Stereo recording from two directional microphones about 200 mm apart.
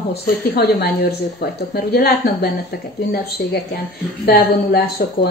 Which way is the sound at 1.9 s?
50° left (ahead or behind).